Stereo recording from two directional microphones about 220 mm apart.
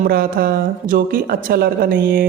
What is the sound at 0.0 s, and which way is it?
Speech, 40° right (ahead or behind).